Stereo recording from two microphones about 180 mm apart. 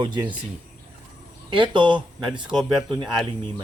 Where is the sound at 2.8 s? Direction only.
25° right (ahead or behind).